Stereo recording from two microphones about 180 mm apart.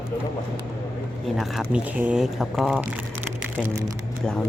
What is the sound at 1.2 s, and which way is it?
Speech, centre (ahead or behind).